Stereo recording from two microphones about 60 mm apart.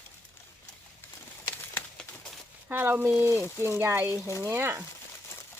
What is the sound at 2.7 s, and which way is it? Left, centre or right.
Speech, right.